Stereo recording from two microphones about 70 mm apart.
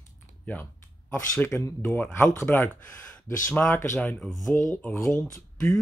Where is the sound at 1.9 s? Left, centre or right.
Left.